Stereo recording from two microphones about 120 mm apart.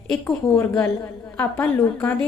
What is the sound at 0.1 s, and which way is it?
A woman's voice, 5° left (ahead or behind).